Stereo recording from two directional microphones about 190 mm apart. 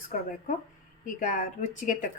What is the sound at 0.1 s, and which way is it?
Speech, 45° left (ahead or behind).